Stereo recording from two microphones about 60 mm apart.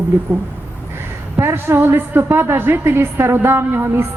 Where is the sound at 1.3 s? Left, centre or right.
Right.